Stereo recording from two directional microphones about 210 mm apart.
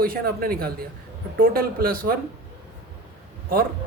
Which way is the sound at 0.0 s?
45° right (ahead or behind).